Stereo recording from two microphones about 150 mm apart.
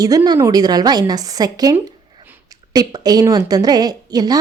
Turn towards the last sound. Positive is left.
turn(degrees=-25)  # may be behind; listen again after turning